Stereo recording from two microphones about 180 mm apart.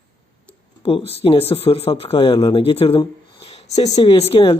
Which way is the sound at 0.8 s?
30° left (ahead or behind).